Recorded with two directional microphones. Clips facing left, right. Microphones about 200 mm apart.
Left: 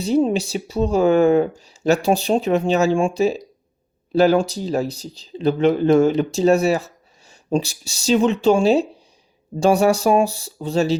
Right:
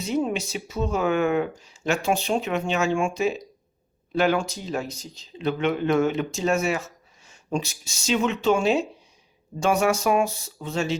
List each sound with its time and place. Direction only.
0.0 s speech: 30° left (ahead or behind)